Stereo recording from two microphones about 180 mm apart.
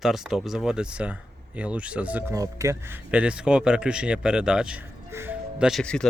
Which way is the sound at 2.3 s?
20° right (ahead or behind).